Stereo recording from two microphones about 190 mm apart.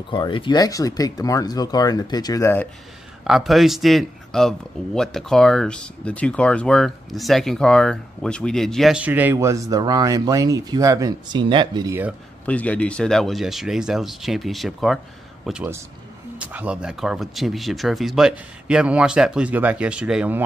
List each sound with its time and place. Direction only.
0.1 s speech: 25° left (ahead or behind)
3.3 s a man's voice: centre (ahead or behind); by 12.0 s 20° right (ahead or behind)
12.4 s a man's voice: 5° left (ahead or behind)